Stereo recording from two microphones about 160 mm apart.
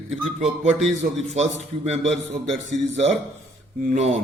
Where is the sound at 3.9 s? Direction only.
45° right (ahead or behind).